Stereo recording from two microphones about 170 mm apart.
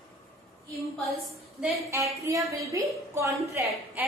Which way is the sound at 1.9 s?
15° right (ahead or behind).